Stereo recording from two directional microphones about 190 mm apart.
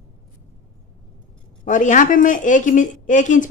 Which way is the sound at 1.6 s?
40° left (ahead or behind).